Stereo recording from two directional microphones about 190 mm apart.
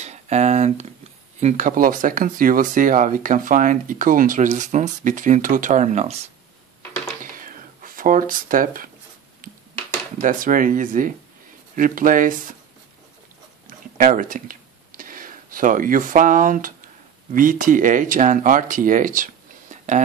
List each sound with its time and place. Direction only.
0.0 s a sound: 35° right (ahead or behind)
1.4 s speech: 45° right (ahead or behind)
7.3 s a sound: 45° right (ahead or behind)
10.2 s speech: 45° right (ahead or behind)
13.7 s speech: 45° right (ahead or behind)
19.7 s whispering: 40° right (ahead or behind)